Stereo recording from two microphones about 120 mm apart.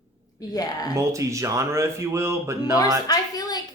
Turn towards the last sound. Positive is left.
turn(degrees=30)  # may be behind; listen again after turning